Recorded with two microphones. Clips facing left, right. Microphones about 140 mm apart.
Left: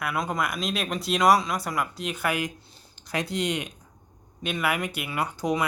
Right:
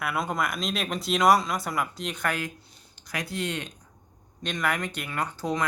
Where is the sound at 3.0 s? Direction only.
25° left (ahead or behind).